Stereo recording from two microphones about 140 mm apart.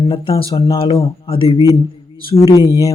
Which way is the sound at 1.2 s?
40° left (ahead or behind).